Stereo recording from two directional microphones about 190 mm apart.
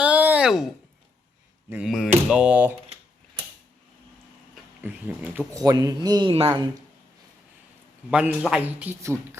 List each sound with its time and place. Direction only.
0.0 s a sound: 5° right (ahead or behind)
1.7 s speech: centre (ahead or behind)
4.8 s speech: 10° right (ahead or behind); by 6.6 s 30° right (ahead or behind)
8.1 s a man's voice: 5° right (ahead or behind)